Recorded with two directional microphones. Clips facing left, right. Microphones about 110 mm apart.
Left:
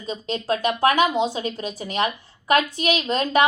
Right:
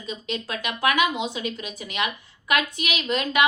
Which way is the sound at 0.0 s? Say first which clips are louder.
Left 3 dB; 35° left (ahead or behind).